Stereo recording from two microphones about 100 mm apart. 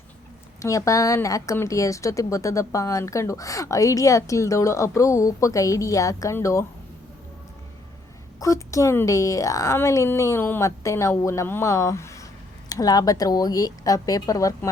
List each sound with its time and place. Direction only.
0.6 s a woman's voice: 30° left (ahead or behind)
8.4 s a woman's voice: 30° left (ahead or behind)